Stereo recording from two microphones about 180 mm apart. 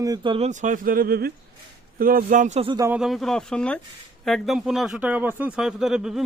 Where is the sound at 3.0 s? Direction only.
Centre (ahead or behind).